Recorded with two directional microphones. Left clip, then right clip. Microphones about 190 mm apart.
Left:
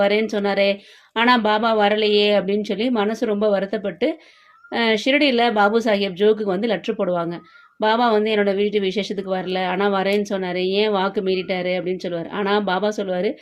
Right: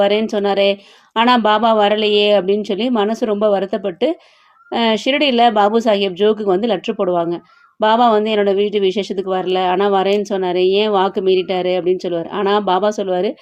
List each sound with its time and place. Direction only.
0.0 s speech: 30° right (ahead or behind)